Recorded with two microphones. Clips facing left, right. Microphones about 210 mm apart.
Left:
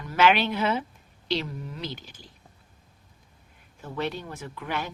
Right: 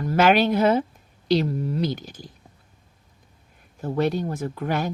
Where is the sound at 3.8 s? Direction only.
40° right (ahead or behind).